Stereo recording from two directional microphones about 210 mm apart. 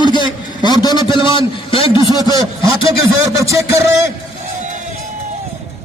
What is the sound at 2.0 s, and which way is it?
Speech, 15° right (ahead or behind).